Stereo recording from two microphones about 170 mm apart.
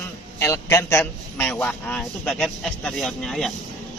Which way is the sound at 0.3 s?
15° left (ahead or behind).